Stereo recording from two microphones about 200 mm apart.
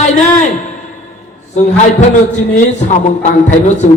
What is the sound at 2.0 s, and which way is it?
A man's voice, 35° left (ahead or behind).